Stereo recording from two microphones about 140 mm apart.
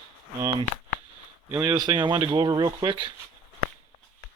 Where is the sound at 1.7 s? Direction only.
30° right (ahead or behind).